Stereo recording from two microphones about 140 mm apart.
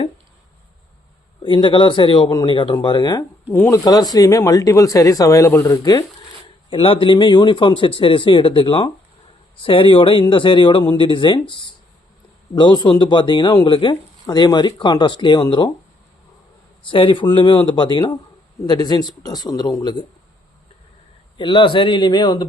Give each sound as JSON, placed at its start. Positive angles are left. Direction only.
{"t": 1.4, "sound": "speech", "side_deg": 35}
{"t": 3.5, "sound": "speech", "side_deg": 15}
{"t": 3.8, "sound": "speech", "side_deg": 25}
{"t": 6.7, "sound": "speech", "side_deg": 40}
{"t": 16.8, "sound": "speech", "side_deg": 35}
{"t": 21.3, "sound": "speech", "side_deg": 35}